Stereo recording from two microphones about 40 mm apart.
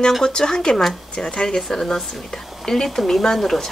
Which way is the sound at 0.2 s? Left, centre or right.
Centre.